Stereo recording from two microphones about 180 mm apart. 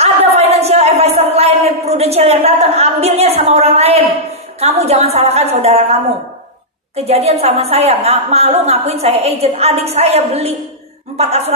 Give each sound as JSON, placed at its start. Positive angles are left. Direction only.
{"t": 0.0, "sound": "a sound", "side_deg": -35}
{"t": 4.6, "sound": "a woman's voice", "side_deg": -35}
{"t": 7.1, "sound": "a woman's voice", "side_deg": -35}